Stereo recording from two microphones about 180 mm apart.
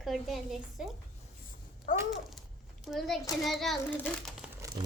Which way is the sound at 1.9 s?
45° left (ahead or behind).